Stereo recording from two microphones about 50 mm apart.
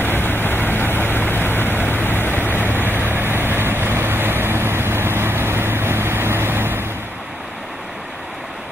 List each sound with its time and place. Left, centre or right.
0.0 s vehicle: left
2.7 s vehicle: right